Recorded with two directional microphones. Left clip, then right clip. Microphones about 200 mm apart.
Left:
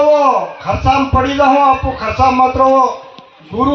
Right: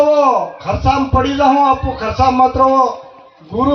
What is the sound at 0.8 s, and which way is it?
A man's voice, 40° left (ahead or behind).